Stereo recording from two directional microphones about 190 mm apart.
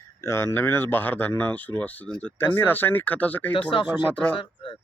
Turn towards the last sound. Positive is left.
turn(degrees=5)  # may be behind; listen again after turning